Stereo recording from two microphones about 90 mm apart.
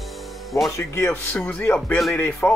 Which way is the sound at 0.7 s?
30° left (ahead or behind).